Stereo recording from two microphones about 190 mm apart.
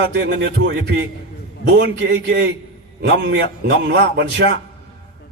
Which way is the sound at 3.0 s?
65° right (ahead or behind).